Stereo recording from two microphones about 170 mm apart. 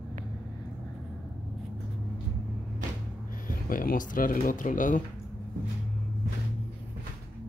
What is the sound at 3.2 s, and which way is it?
Speech, 55° left (ahead or behind).